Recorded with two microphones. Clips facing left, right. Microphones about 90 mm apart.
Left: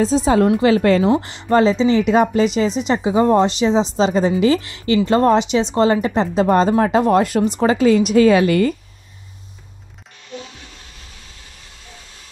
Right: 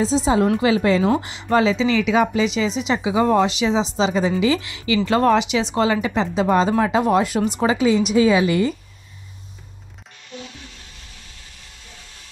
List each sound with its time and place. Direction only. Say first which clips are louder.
0.0 s a woman's voice: left 3 dB; 45° left (ahead or behind)